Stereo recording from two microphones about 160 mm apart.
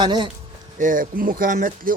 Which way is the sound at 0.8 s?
60° right (ahead or behind).